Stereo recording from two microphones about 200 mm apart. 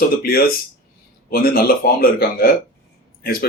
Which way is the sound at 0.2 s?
50° left (ahead or behind).